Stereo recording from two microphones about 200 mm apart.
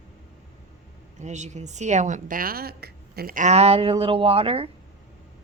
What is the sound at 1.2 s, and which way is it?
A woman's voice, 35° right (ahead or behind).